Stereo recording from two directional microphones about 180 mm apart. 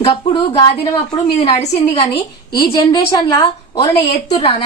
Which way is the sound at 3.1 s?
20° left (ahead or behind).